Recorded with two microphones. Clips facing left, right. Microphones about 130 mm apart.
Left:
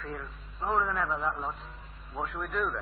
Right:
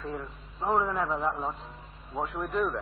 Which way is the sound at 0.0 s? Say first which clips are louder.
Right 3 dB; 20° right (ahead or behind).